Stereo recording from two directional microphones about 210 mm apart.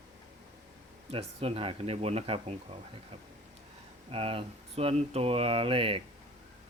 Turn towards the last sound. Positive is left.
turn(degrees=-25)  # may be behind; listen again after turning